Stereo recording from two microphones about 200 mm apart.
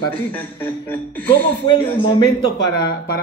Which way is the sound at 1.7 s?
20° left (ahead or behind).